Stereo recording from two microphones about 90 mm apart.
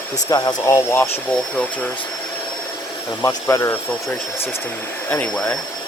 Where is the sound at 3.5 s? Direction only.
30° left (ahead or behind).